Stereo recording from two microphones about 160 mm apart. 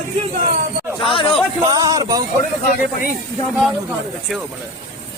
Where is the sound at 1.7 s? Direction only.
25° right (ahead or behind).